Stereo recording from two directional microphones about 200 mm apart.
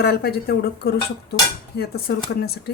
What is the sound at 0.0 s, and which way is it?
Speech, 50° left (ahead or behind).